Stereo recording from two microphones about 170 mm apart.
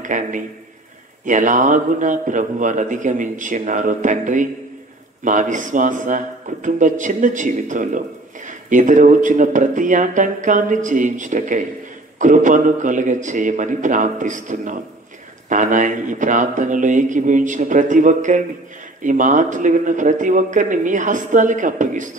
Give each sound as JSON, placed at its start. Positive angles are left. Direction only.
{"t": 0.0, "sound": "a man's voice", "side_deg": -50}